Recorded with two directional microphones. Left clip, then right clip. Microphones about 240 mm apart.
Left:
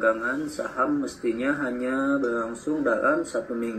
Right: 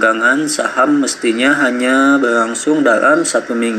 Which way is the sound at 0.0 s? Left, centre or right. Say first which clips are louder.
Right 12 dB; right.